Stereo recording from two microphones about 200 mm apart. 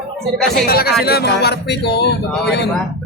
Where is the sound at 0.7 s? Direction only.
50° left (ahead or behind).